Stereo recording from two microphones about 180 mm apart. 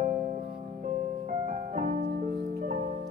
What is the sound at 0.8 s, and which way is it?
Music, 45° right (ahead or behind).